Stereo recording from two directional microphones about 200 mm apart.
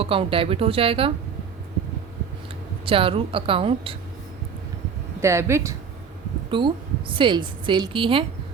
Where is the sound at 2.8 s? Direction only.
25° right (ahead or behind).